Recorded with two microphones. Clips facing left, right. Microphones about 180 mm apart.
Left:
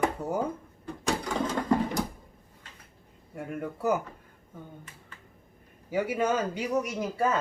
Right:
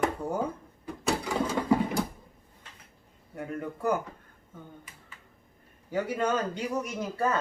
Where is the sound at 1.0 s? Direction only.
10° right (ahead or behind).